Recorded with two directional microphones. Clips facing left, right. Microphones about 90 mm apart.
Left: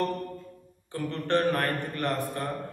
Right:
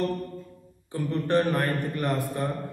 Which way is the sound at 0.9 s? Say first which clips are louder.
Right 3 dB; 15° right (ahead or behind).